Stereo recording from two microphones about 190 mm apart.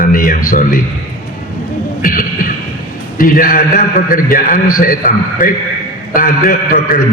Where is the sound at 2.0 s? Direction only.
45° left (ahead or behind).